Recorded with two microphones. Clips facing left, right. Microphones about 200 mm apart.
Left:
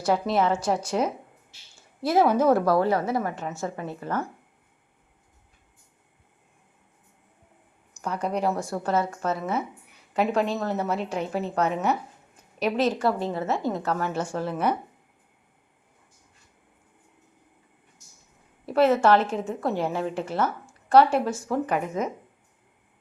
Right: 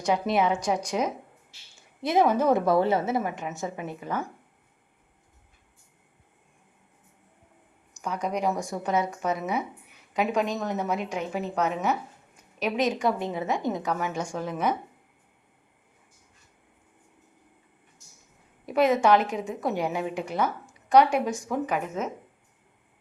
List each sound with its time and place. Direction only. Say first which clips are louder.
0.1 s a woman's voice: left 1 dB; 5° right (ahead or behind)
1.7 s a sound: left 2 dB; 20° right (ahead or behind)
2.3 s a woman's voice: left 2 dB; 15° right (ahead or behind)
8.0 s a woman's voice: left 1 dB; 10° right (ahead or behind)
18.7 s a woman's voice: left 1 dB; 15° right (ahead or behind)